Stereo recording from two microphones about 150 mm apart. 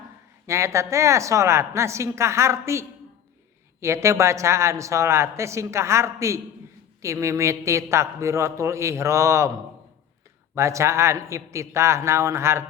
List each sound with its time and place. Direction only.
0.4 s speech: 20° right (ahead or behind)
10.5 s speech: 20° right (ahead or behind)